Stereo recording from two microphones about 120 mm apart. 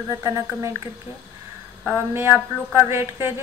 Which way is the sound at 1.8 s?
15° right (ahead or behind).